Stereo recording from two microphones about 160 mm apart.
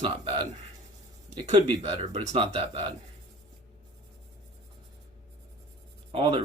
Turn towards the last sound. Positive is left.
turn(degrees=-35)  # may be behind; listen again after turning